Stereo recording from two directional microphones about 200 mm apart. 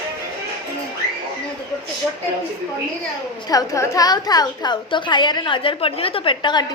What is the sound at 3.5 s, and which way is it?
A woman's voice, 15° left (ahead or behind).